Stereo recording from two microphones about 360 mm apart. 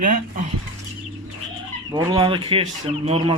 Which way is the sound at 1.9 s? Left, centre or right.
Centre.